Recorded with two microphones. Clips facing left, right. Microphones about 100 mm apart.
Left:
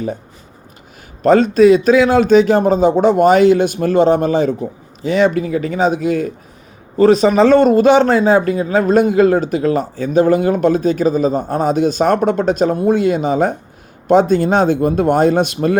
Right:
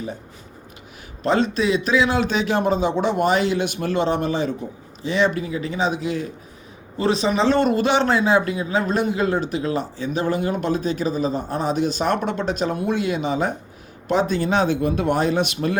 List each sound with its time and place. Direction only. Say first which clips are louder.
1.2 s a man's voice: left 10 dB; 45° left (ahead or behind)